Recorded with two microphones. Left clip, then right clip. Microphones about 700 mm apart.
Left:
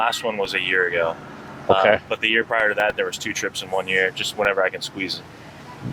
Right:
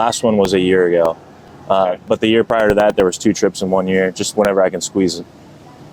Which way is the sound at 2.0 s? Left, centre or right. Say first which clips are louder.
Right 6 dB; right.